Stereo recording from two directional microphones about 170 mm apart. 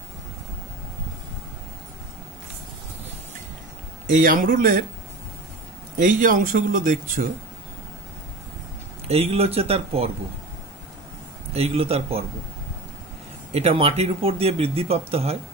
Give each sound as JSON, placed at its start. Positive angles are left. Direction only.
{"t": 4.1, "sound": "a man's voice", "side_deg": -55}
{"t": 5.9, "sound": "speech", "side_deg": -50}
{"t": 9.0, "sound": "speech", "side_deg": -35}
{"t": 11.5, "sound": "speech", "side_deg": -35}
{"t": 13.5, "sound": "speech", "side_deg": -35}